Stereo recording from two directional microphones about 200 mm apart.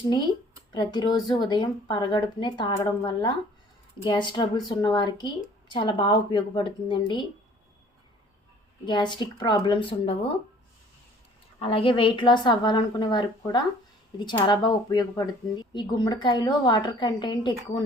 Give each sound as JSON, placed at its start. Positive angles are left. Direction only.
{"t": 0.7, "sound": "a woman's voice", "side_deg": 20}
{"t": 8.8, "sound": "a woman's voice", "side_deg": 20}
{"t": 11.6, "sound": "a woman's voice", "side_deg": 30}